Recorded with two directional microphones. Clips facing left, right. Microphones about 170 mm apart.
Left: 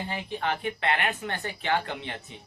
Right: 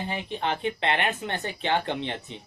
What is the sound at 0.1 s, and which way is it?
Speech, 20° right (ahead or behind).